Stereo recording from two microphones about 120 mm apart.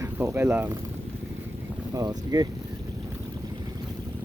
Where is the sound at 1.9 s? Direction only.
30° right (ahead or behind).